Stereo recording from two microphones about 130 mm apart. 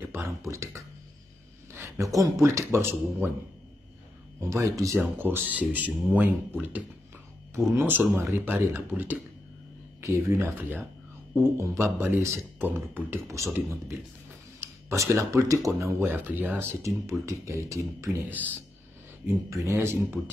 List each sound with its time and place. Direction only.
0.0 s a sound: 20° right (ahead or behind)
0.4 s speech: 25° right (ahead or behind)
1.7 s a sound: 20° right (ahead or behind)
2.4 s speech: 20° right (ahead or behind)
4.4 s speech: 25° right (ahead or behind)
14.6 s speech: 20° right (ahead or behind)